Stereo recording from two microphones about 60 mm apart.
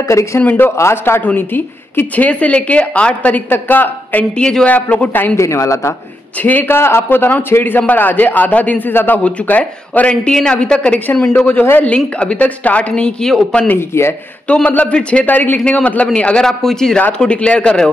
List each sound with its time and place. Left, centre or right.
0.1 s a woman's voice: left
0.4 s a man's voice: left
0.7 s a woman's voice: left
4.4 s a man's voice: centre
4.6 s a woman's voice: left
5.4 s a woman's voice: left
6.4 s a man's voice: left; by 11.0 s centre
11.3 s a woman's voice: left
13.7 s a man's voice: left
14.5 s a woman's voice: left
16.4 s a man's voice: centre